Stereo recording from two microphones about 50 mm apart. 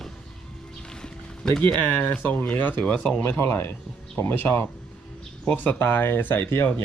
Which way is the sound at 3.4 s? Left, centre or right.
Left.